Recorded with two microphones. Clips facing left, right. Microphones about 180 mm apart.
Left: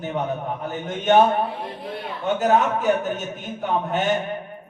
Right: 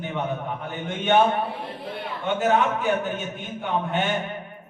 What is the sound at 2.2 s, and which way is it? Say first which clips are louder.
A man's voice: left 2 dB; 40° left (ahead or behind).